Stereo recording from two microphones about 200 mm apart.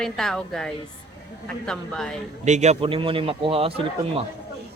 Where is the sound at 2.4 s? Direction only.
35° right (ahead or behind).